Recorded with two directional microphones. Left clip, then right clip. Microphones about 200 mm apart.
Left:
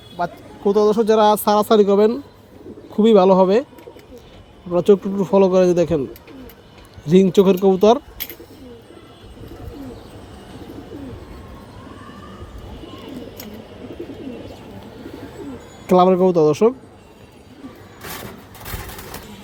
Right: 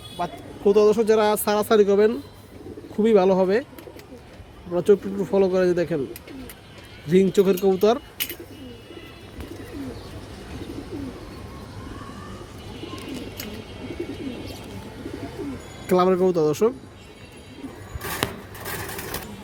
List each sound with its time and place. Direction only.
0.2 s speech: 25° left (ahead or behind)
4.7 s speech: 25° left (ahead or behind)
7.1 s speech: 25° left (ahead or behind)
15.9 s speech: 25° left (ahead or behind)